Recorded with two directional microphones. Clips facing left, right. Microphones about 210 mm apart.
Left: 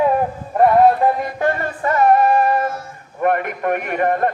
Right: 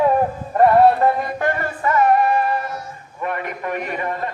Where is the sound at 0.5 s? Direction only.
10° left (ahead or behind).